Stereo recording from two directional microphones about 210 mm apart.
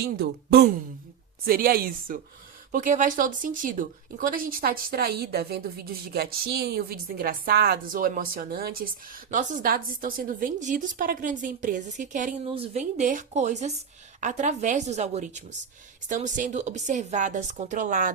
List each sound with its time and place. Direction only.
0.0 s a woman's voice: 50° right (ahead or behind)